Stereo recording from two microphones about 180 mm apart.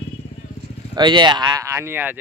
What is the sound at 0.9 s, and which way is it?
Speech, 25° right (ahead or behind).